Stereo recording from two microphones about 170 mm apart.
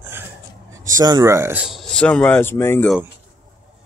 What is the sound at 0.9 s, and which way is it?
Speech, 20° right (ahead or behind).